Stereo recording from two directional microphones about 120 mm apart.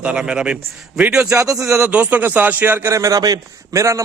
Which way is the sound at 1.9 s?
10° right (ahead or behind).